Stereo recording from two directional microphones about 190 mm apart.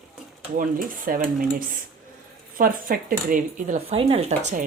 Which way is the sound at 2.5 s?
50° right (ahead or behind).